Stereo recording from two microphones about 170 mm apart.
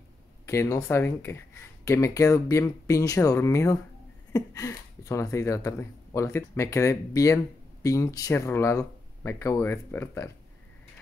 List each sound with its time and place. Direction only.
0.5 s speech: 15° left (ahead or behind)